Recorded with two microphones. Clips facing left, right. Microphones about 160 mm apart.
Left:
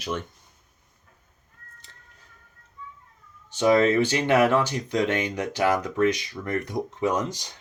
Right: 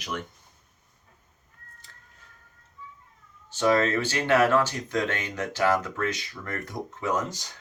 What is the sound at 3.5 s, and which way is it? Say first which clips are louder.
Speech: left 4 dB; 15° left (ahead or behind).